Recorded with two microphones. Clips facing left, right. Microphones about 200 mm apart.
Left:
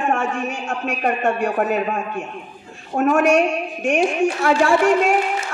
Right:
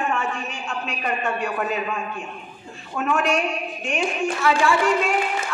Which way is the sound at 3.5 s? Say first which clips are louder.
Left 7 dB; 70° left (ahead or behind).